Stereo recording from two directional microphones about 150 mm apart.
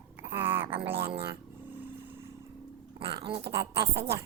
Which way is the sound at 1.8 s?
15° right (ahead or behind).